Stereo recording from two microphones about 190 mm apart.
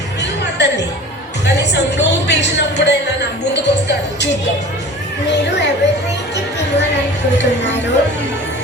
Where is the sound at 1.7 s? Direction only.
65° left (ahead or behind).